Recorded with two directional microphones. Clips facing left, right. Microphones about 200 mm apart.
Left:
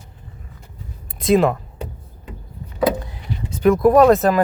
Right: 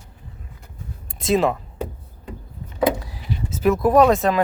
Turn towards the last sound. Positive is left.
turn(degrees=0)  # may be behind; listen again after turning